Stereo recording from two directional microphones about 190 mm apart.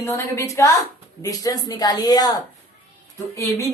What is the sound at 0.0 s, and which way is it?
A woman's voice, 15° left (ahead or behind).